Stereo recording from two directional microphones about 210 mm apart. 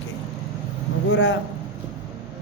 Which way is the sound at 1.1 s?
60° left (ahead or behind).